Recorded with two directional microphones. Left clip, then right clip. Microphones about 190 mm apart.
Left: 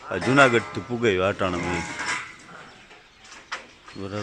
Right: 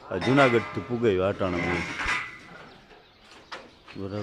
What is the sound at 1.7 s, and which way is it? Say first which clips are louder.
Speech: even; 55° left (ahead or behind).